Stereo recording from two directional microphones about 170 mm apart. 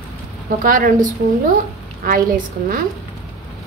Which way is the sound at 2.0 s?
55° right (ahead or behind).